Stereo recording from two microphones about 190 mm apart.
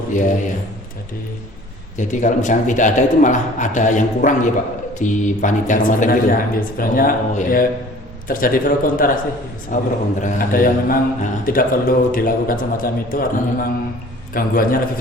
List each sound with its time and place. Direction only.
0.1 s speech: 40° left (ahead or behind)
2.0 s a man's voice: 40° left (ahead or behind)